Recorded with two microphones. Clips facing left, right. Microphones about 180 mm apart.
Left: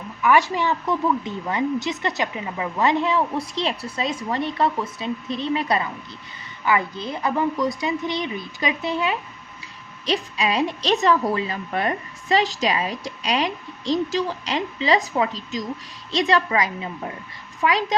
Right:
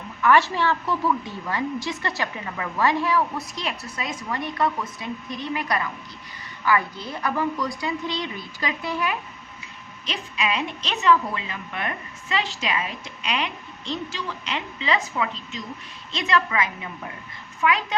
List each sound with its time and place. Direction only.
0.2 s a woman's voice: 15° left (ahead or behind)
10.1 s a woman's voice: 35° left (ahead or behind)